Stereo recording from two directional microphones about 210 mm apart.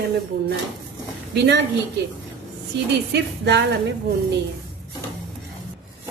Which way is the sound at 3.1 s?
55° right (ahead or behind).